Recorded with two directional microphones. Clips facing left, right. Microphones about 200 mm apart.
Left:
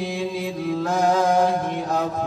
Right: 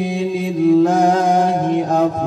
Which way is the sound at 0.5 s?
25° right (ahead or behind).